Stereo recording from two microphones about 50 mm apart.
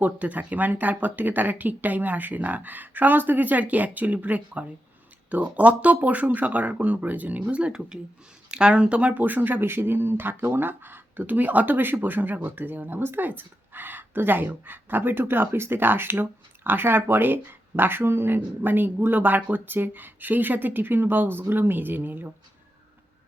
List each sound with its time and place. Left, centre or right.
0.0 s speech: right
9.2 s speech: right